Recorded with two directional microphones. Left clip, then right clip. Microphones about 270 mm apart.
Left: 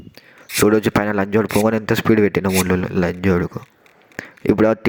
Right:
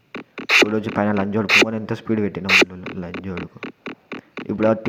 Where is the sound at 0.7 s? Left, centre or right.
Left.